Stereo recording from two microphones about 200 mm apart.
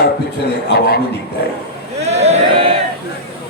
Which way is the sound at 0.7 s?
55° left (ahead or behind).